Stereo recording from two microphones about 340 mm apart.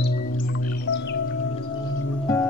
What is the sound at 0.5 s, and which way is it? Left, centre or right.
Music, left.